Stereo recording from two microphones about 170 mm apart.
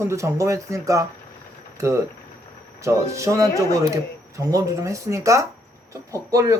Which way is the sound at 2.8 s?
20° right (ahead or behind).